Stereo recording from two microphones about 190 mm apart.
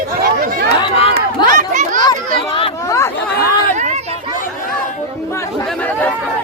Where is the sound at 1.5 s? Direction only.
40° right (ahead or behind).